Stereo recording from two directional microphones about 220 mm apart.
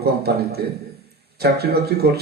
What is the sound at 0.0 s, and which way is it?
A man's voice, 45° right (ahead or behind).